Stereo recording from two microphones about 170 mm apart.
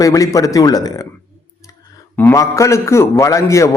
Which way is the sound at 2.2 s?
15° left (ahead or behind).